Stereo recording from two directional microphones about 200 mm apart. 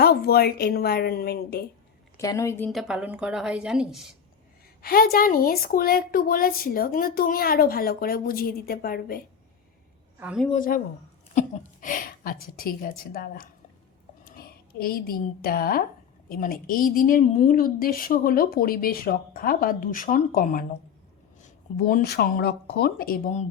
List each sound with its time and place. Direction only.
0.0 s a woman's voice: 50° left (ahead or behind)
2.1 s a woman's voice: 15° left (ahead or behind)
2.7 s a woman's voice: 5° right (ahead or behind)
4.8 s a woman's voice: 50° left (ahead or behind)
10.2 s speech: 5° right (ahead or behind)
10.5 s a woman's voice: 45° left (ahead or behind)
21.8 s a woman's voice: 45° left (ahead or behind)